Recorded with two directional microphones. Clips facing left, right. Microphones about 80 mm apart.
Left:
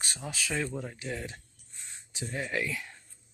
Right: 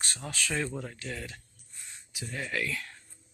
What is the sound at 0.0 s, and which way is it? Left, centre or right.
Speech, centre.